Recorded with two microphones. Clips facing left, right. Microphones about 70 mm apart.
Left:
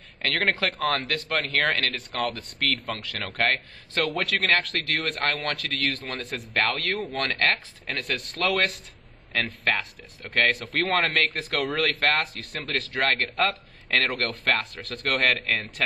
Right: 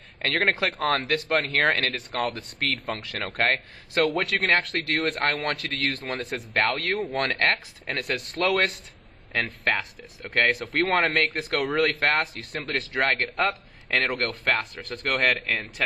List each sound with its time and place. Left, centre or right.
0.2 s speech: right
0.7 s speech: centre
3.3 s speech: centre
4.0 s speech: centre